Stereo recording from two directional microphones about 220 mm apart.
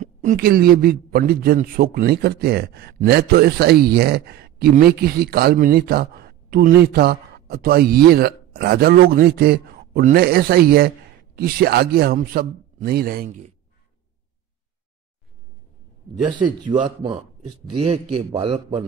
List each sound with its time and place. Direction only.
0.0 s a man's voice: 35° right (ahead or behind)
16.7 s a man's voice: 20° right (ahead or behind)